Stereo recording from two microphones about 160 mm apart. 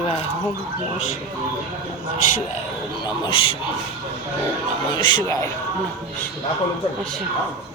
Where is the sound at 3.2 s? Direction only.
35° left (ahead or behind).